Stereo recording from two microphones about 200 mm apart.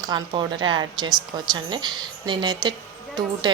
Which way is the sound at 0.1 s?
25° right (ahead or behind).